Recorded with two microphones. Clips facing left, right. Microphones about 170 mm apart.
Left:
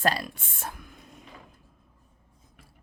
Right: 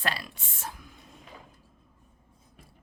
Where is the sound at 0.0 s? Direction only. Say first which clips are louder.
Left 7 dB; 45° left (ahead or behind).